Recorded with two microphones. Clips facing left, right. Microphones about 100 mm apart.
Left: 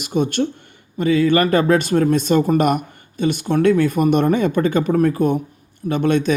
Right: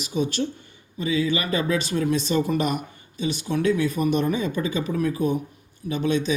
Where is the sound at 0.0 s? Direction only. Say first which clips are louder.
Left 6 dB; 55° left (ahead or behind).